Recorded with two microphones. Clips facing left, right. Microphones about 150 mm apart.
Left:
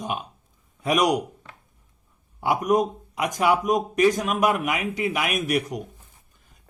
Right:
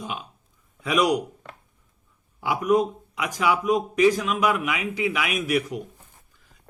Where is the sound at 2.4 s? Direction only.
45° left (ahead or behind).